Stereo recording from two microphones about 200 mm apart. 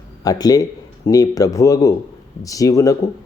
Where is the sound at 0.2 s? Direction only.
20° left (ahead or behind).